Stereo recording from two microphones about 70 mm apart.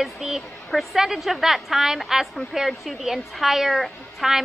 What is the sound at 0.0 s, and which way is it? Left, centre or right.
A woman's voice, centre.